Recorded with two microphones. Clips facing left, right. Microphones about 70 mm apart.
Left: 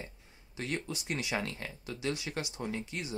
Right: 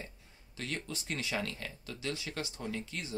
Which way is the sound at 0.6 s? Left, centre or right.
Left.